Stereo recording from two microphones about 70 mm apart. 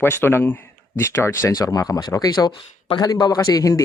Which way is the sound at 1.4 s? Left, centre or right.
Left.